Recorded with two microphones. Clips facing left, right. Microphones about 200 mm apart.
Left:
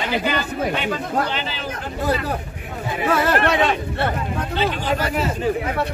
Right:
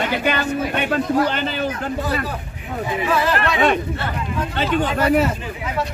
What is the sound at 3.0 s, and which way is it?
Speech, 55° left (ahead or behind).